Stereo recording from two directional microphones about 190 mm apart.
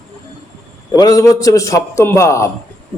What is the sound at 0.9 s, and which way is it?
A man's voice, 20° left (ahead or behind).